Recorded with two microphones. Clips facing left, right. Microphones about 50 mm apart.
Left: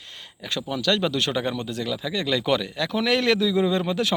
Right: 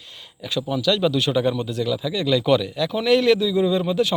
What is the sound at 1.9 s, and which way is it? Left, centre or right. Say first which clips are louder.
A man's voice: right 4 dB; left.